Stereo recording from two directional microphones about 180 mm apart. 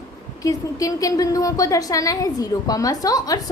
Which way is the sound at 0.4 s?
20° left (ahead or behind).